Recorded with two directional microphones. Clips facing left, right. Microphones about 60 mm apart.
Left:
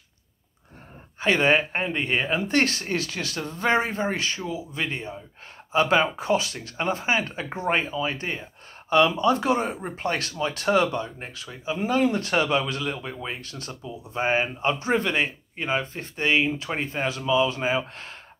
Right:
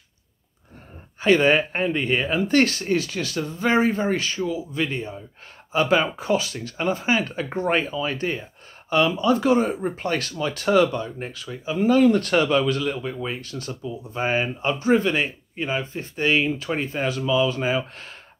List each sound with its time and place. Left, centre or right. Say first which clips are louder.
1.2 s speech: right 3 dB; left